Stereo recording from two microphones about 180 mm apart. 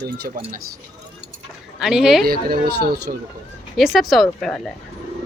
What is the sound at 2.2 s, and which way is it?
Speech, 55° right (ahead or behind).